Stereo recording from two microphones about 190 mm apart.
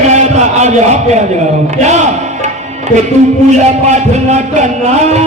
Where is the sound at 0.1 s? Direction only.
35° right (ahead or behind).